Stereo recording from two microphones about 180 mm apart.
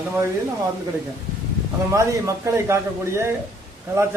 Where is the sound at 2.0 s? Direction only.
15° right (ahead or behind).